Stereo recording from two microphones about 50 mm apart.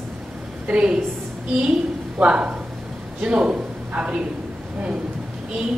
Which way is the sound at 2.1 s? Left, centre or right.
Right.